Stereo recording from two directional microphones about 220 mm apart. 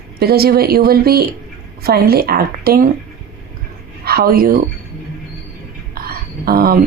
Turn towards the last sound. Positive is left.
turn(degrees=-45)  # may be behind; listen again after turning